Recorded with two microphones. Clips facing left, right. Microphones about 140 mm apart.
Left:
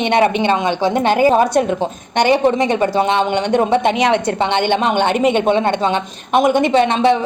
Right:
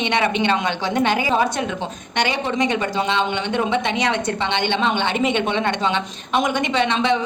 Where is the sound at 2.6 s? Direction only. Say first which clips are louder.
Left 5 dB; 35° left (ahead or behind).